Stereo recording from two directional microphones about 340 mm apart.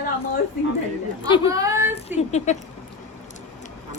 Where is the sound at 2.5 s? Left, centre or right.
Left.